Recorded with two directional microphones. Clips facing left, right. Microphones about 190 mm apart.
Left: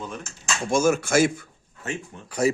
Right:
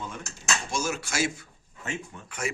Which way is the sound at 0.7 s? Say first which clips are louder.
Left 13 dB; 50° left (ahead or behind).